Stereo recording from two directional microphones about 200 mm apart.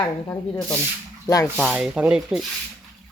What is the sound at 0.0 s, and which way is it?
Speech, 15° left (ahead or behind).